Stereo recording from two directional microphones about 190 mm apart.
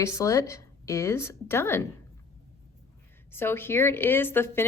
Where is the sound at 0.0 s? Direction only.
15° left (ahead or behind).